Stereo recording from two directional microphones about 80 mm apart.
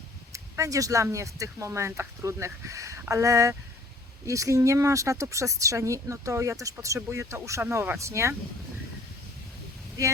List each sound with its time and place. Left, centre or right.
0.3 s speech: right